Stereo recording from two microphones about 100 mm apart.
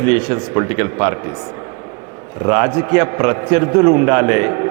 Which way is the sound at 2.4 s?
25° right (ahead or behind).